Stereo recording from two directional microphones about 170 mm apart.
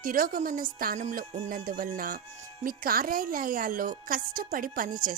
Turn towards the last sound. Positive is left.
turn(degrees=-55)  # may be behind; listen again after turning